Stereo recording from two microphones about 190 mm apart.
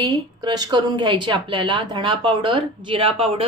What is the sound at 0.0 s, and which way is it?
A woman's voice, 20° right (ahead or behind).